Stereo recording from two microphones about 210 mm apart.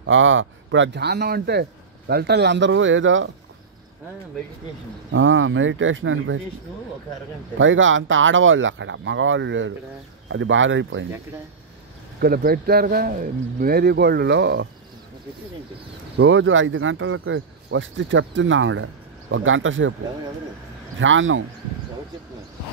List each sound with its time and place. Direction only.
0.0 s speech: 65° right (ahead or behind)
5.1 s speech: 70° right (ahead or behind)
7.5 s speech: 65° right (ahead or behind)
12.2 s speech: 45° right (ahead or behind)
16.2 s speech: 65° right (ahead or behind)
21.0 s speech: 65° right (ahead or behind)